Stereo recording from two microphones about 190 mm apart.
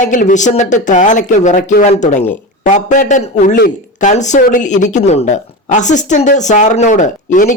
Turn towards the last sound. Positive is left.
turn(degrees=40)  # may be behind; listen again after turning